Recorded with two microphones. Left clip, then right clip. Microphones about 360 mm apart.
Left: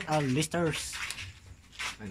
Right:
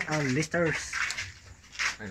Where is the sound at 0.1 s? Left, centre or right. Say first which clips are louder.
Left 2 dB; centre.